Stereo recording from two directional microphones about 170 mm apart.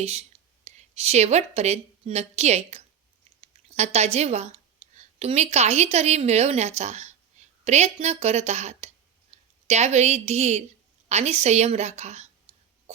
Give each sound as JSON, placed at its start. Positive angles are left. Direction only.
{"t": 0.0, "sound": "a woman's voice", "side_deg": -40}